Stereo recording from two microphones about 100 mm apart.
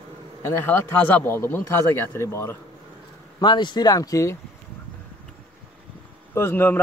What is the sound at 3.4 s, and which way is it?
Speech, 50° left (ahead or behind).